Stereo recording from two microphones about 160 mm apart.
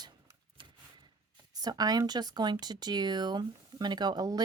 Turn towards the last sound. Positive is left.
turn(degrees=-25)  # may be behind; listen again after turning